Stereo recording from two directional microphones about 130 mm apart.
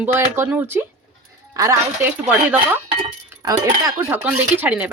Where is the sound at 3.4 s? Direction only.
25° right (ahead or behind).